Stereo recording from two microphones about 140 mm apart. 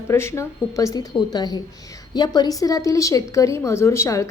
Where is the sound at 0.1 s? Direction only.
20° left (ahead or behind).